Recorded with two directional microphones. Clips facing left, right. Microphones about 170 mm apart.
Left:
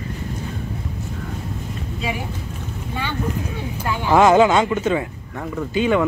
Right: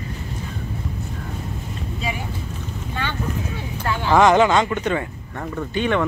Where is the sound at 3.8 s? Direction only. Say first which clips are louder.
Left 1 dB; 10° left (ahead or behind).